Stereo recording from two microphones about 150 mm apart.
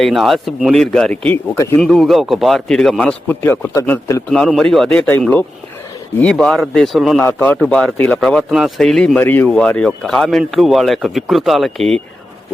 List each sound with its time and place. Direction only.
0.0 s a man's voice: centre (ahead or behind); by 1.8 s 15° left (ahead or behind)
1.8 s a man's voice: centre (ahead or behind)
7.2 s a man's voice: 10° left (ahead or behind)